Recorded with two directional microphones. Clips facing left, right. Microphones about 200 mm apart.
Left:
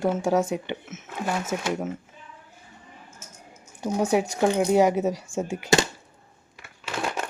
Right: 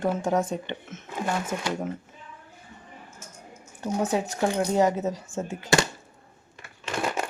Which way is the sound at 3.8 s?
15° left (ahead or behind).